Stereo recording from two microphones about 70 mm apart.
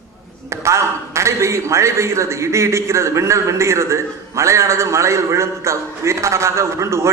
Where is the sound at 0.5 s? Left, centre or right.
Right.